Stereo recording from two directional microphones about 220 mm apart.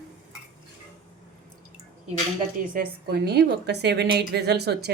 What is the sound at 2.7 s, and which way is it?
A woman's voice, 45° right (ahead or behind).